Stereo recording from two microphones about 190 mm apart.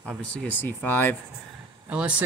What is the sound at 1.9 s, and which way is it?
Speech, 5° right (ahead or behind).